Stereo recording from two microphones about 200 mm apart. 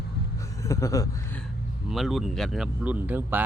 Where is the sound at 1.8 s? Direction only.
Centre (ahead or behind).